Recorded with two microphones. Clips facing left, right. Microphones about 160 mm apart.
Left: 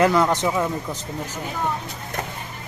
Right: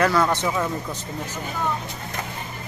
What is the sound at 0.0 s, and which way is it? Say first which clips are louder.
Speech: left 2 dB; 20° left (ahead or behind).